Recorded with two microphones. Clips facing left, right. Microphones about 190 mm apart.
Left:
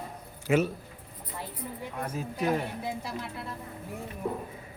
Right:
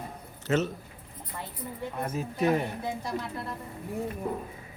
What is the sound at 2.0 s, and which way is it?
Speech, 5° right (ahead or behind).